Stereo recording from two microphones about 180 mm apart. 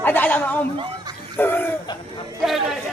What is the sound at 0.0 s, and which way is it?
Chatter, 10° left (ahead or behind).